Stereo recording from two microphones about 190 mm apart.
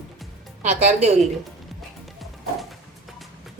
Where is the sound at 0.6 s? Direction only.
35° right (ahead or behind).